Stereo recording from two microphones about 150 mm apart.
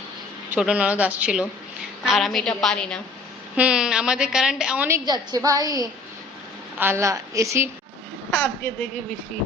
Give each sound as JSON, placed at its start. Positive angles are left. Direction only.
{"t": 0.5, "sound": "a woman's voice", "side_deg": -10}
{"t": 3.5, "sound": "a woman's voice", "side_deg": -5}
{"t": 4.9, "sound": "a woman's voice", "side_deg": -25}
{"t": 8.3, "sound": "a woman's voice", "side_deg": 10}